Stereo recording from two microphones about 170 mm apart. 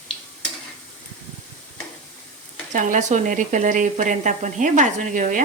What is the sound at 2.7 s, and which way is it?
Speech, 50° right (ahead or behind).